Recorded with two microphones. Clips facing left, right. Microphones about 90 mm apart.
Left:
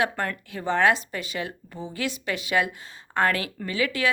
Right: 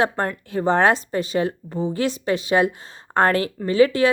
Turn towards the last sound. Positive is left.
turn(degrees=-35)  # may be behind; listen again after turning